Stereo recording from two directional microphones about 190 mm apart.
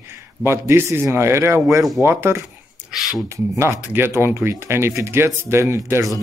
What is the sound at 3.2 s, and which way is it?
Speech, 15° right (ahead or behind).